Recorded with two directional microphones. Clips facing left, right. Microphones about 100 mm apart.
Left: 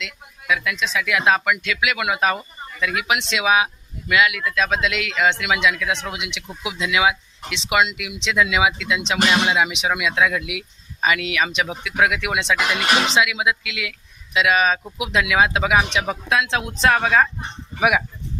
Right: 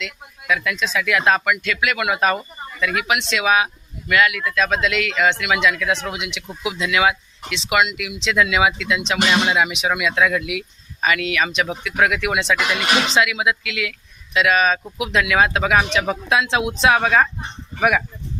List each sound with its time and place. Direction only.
0.0 s speech: 5° left (ahead or behind)
2.8 s speech: 20° left (ahead or behind)
7.5 s speech: 25° left (ahead or behind)
12.5 s speech: 5° left (ahead or behind)
13.1 s speech: 15° left (ahead or behind)
16.0 s speech: centre (ahead or behind)